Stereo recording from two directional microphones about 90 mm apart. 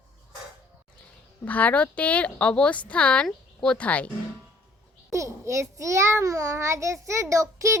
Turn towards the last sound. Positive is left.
turn(degrees=-35)  # may be behind; listen again after turning